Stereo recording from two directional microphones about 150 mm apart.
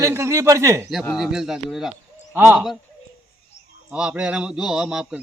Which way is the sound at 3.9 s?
5° right (ahead or behind).